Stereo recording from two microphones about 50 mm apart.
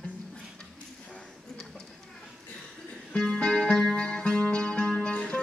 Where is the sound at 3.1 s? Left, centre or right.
Centre.